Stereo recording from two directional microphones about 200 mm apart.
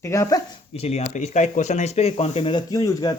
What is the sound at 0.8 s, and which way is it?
Speech, 35° left (ahead or behind).